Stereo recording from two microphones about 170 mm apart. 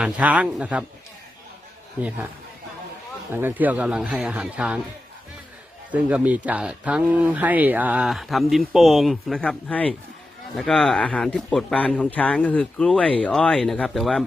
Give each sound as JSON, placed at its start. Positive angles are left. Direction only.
{"t": 0.0, "sound": "speech", "side_deg": -10}
{"t": 2.0, "sound": "speech", "side_deg": -10}
{"t": 3.3, "sound": "speech", "side_deg": -10}
{"t": 5.9, "sound": "speech", "side_deg": -10}